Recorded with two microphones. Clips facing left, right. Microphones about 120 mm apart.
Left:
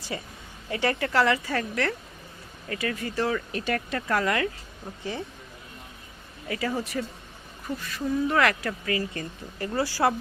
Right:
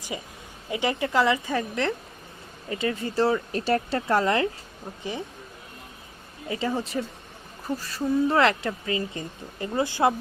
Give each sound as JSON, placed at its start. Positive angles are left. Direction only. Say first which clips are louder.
{"t": 0.1, "sound": "speech", "louder": "even", "side_deg": -15}
{"t": 6.5, "sound": "speech", "louder": "right 2 dB", "side_deg": -25}